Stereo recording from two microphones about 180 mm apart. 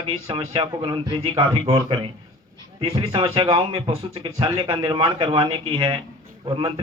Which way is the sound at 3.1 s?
25° right (ahead or behind).